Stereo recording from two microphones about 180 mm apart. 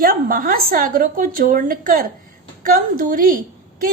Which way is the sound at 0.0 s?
50° right (ahead or behind).